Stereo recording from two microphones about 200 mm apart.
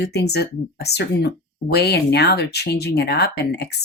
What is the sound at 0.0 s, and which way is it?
Speech, 55° left (ahead or behind).